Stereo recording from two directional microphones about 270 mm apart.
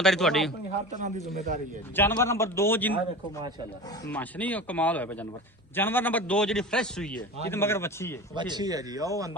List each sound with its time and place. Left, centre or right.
0.0 s a man's voice: centre
2.0 s a man's voice: centre
4.1 s a man's voice: centre
8.4 s speech: centre